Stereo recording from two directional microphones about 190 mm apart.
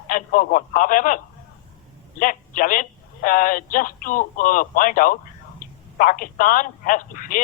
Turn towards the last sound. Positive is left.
turn(degrees=45)  # may be behind; listen again after turning